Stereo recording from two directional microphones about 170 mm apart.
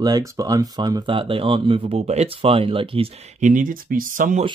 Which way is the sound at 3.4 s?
50° right (ahead or behind).